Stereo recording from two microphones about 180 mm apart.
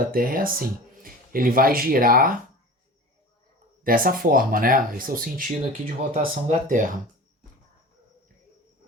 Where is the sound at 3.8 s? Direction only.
50° right (ahead or behind).